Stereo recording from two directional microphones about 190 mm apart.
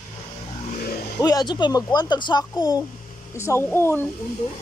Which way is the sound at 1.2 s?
20° left (ahead or behind).